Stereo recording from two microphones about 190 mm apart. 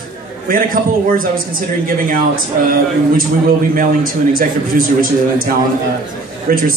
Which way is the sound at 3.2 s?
50° right (ahead or behind).